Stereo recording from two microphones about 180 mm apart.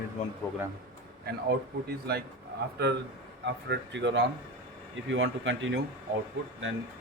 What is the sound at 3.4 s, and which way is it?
A man's voice, 75° right (ahead or behind).